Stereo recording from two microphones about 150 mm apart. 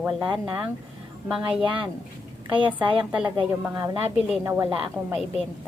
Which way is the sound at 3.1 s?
10° right (ahead or behind).